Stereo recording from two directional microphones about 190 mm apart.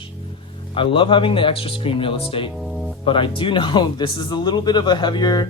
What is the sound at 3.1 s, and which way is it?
Speech, 25° left (ahead or behind).